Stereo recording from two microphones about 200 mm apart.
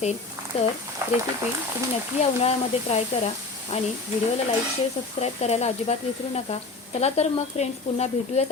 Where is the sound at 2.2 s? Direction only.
30° left (ahead or behind).